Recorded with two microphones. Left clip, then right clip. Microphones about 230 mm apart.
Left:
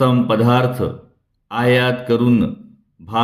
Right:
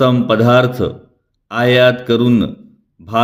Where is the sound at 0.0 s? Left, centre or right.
Right.